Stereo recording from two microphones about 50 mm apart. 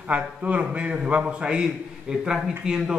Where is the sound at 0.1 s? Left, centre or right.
Right.